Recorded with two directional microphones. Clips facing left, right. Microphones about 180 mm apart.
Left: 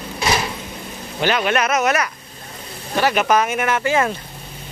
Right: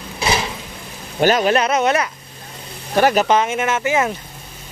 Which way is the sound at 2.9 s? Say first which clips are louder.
Right 4 dB; 40° right (ahead or behind).